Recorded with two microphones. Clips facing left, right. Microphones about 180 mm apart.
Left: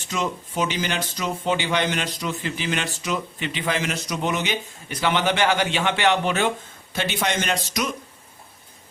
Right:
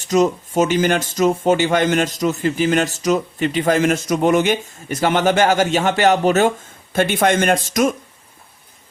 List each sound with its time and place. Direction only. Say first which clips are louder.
0.0 s speech: right 11 dB; 40° right (ahead or behind)